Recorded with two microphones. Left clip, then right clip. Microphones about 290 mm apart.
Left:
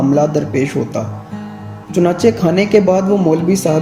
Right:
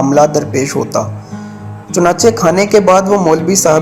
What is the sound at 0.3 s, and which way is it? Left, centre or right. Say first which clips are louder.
Speech: right 3 dB; right.